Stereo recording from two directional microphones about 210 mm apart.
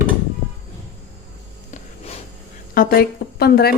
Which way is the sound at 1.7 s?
30° left (ahead or behind).